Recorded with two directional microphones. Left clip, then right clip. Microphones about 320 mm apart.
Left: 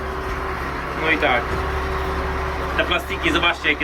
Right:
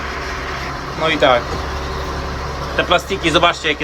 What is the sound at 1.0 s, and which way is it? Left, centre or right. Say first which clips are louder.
Speech: right 5 dB; right.